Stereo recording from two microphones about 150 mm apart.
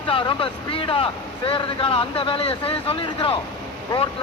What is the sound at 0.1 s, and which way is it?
Speech, 35° left (ahead or behind).